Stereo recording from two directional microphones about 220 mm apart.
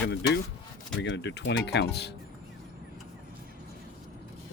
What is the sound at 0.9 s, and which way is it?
Speech, 55° left (ahead or behind).